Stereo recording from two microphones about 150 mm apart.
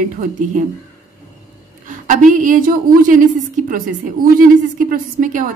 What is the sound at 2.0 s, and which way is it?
A woman's voice, 60° right (ahead or behind).